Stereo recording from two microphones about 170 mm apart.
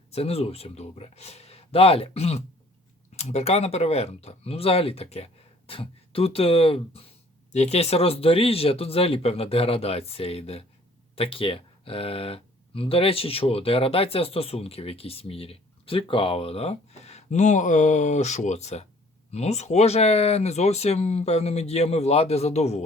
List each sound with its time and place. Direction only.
0.1 s speech: 35° left (ahead or behind)